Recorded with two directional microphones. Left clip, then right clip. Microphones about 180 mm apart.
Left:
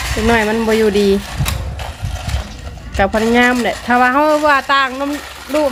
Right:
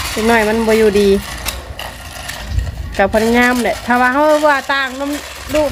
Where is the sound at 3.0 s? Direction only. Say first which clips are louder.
Right 1 dB; 5° right (ahead or behind).